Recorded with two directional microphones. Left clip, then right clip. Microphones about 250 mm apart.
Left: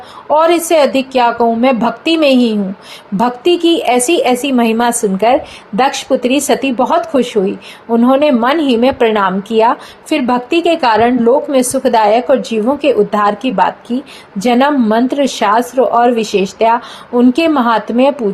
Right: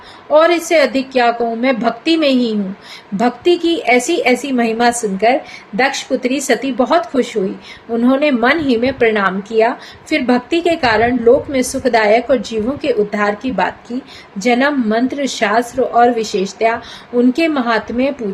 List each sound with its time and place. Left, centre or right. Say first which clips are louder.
0.3 s a woman's voice: left 1 dB; centre